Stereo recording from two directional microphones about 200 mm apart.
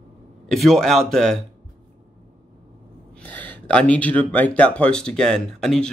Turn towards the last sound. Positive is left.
turn(degrees=5)  # may be behind; listen again after turning